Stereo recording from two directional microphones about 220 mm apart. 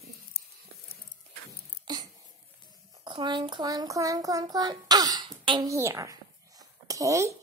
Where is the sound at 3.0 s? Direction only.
20° right (ahead or behind).